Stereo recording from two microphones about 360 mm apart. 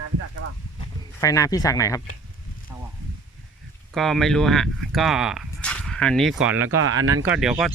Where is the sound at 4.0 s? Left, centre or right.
Centre.